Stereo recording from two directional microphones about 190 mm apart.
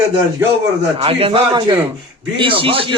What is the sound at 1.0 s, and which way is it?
Speech, 30° right (ahead or behind).